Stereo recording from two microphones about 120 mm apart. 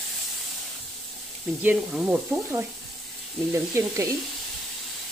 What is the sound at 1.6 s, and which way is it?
Speech, 15° right (ahead or behind).